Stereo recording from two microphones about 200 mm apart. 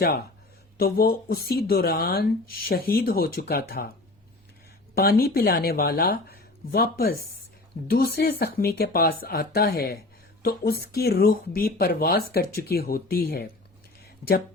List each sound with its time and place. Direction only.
0.8 s speech: 50° left (ahead or behind)
4.9 s speech: 50° left (ahead or behind)
14.0 s a sound: 45° left (ahead or behind)